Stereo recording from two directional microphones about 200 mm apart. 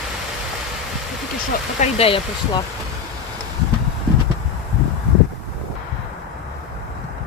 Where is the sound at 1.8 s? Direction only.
30° left (ahead or behind).